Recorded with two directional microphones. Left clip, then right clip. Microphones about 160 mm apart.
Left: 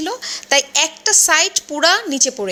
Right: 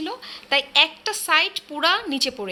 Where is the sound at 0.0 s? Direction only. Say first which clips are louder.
Left 7 dB; 40° left (ahead or behind).